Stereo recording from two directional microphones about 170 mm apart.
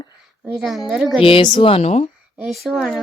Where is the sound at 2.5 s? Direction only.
Centre (ahead or behind).